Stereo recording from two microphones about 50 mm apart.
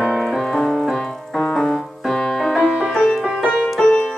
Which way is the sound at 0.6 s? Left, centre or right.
Centre.